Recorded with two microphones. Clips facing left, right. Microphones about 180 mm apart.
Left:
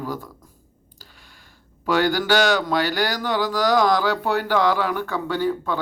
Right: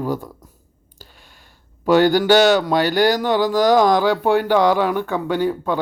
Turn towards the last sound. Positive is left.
turn(degrees=-15)  # may be behind; listen again after turning